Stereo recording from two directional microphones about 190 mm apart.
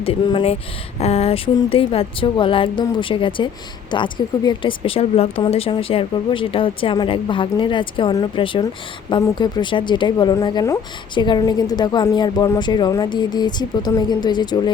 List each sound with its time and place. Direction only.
0.0 s speech: 25° left (ahead or behind)